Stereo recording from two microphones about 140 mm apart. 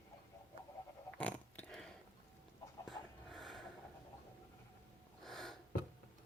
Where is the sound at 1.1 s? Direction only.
10° left (ahead or behind).